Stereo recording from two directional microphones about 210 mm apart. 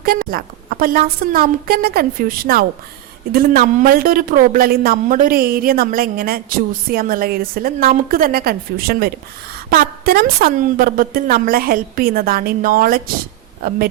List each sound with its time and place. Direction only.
0.0 s a woman's voice: 45° right (ahead or behind)